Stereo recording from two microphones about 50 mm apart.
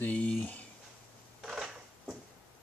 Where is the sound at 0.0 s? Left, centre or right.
Left.